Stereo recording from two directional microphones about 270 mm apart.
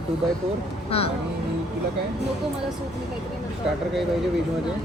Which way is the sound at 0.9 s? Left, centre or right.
Left.